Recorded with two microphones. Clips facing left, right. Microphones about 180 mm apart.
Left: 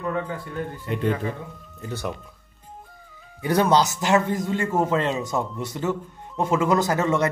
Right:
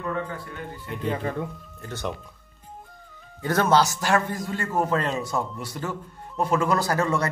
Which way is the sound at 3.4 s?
15° left (ahead or behind).